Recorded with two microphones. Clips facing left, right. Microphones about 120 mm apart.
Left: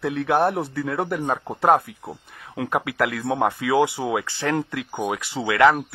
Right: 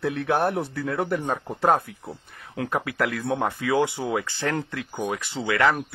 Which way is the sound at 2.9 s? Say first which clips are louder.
Left 2 dB; 50° left (ahead or behind).